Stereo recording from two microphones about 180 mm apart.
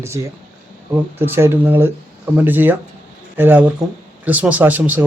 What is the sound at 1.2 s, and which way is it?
Speech, 15° right (ahead or behind).